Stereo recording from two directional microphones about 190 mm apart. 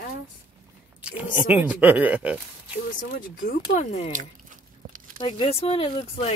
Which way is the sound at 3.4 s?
40° left (ahead or behind).